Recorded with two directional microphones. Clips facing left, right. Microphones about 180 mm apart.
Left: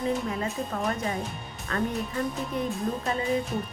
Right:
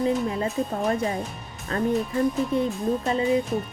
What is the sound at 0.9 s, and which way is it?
Speech, 35° right (ahead or behind).